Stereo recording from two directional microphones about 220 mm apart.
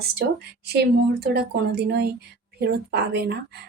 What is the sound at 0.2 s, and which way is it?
A woman's voice, 50° right (ahead or behind).